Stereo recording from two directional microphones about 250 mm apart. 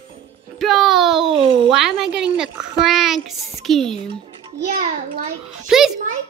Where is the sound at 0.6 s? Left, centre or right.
Centre.